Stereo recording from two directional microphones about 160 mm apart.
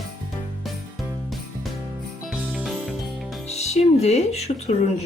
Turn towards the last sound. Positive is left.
turn(degrees=40)  # may be behind; listen again after turning